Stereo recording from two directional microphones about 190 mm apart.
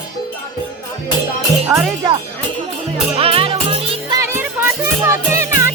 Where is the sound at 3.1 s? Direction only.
30° right (ahead or behind).